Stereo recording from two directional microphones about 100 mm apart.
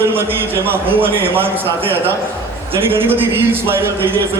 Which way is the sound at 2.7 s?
25° right (ahead or behind).